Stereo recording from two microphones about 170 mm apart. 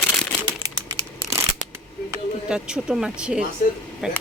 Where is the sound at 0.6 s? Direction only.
25° right (ahead or behind).